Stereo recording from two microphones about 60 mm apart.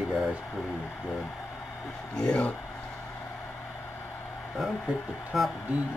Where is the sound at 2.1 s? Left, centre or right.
Centre.